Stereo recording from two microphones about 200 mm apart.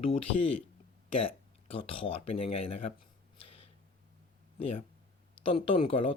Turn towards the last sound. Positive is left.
turn(degrees=25)  # may be behind; listen again after turning